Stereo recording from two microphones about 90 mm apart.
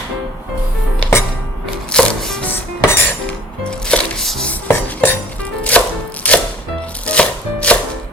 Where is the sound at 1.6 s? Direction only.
5° left (ahead or behind).